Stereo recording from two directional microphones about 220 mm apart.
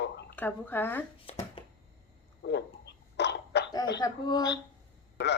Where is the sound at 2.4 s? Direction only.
50° left (ahead or behind).